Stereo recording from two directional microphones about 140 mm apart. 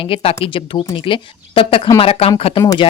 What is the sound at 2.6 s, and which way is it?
Speech, 30° left (ahead or behind).